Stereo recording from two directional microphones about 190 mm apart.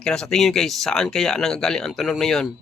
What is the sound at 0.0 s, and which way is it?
Speech, 5° left (ahead or behind).